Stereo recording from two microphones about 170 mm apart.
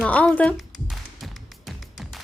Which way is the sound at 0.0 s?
5° left (ahead or behind).